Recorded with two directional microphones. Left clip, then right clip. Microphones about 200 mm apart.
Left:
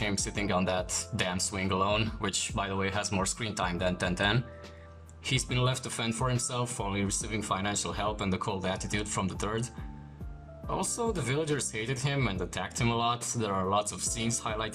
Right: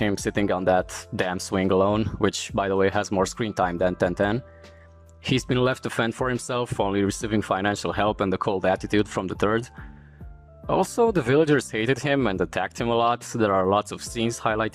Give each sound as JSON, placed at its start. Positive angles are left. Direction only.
{"t": 0.0, "sound": "speech", "side_deg": -40}
{"t": 10.7, "sound": "speech", "side_deg": -45}